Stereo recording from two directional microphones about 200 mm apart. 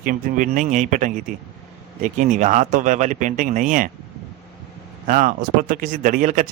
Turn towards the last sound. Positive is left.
turn(degrees=-40)  # may be behind; listen again after turning